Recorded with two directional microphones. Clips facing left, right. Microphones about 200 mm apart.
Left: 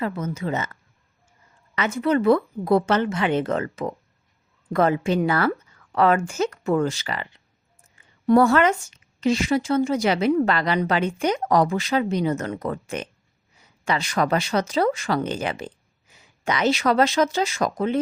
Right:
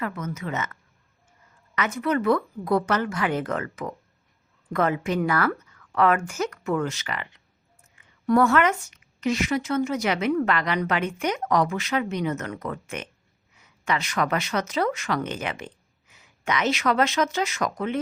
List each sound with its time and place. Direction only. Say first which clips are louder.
0.0 s a woman's voice: left 4 dB; 30° left (ahead or behind)